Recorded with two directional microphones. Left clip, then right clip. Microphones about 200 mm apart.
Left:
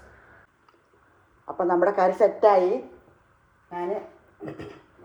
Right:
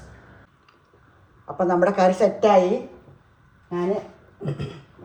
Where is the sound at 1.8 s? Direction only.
30° left (ahead or behind).